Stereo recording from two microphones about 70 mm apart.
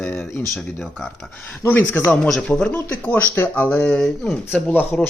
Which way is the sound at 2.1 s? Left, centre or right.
Centre.